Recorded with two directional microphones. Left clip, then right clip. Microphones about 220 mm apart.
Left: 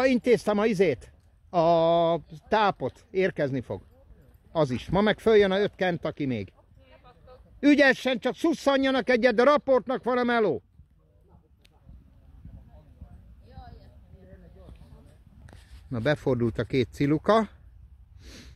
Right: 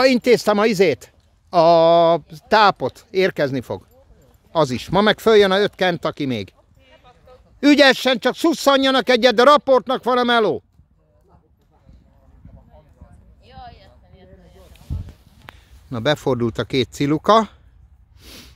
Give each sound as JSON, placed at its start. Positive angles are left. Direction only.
{"t": 0.0, "sound": "speech", "side_deg": -20}
{"t": 7.6, "sound": "speech", "side_deg": -20}
{"t": 13.4, "sound": "a sound", "side_deg": -40}
{"t": 15.9, "sound": "speech", "side_deg": -15}
{"t": 18.2, "sound": "snort", "side_deg": -10}